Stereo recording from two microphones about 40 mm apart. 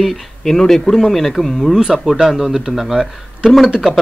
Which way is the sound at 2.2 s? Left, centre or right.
Centre.